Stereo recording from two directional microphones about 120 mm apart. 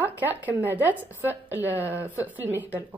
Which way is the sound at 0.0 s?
15° right (ahead or behind).